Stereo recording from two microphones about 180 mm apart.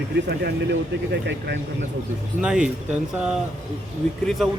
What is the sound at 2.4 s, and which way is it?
Speech, 5° right (ahead or behind).